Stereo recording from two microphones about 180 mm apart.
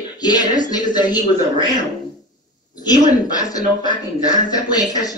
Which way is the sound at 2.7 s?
20° left (ahead or behind).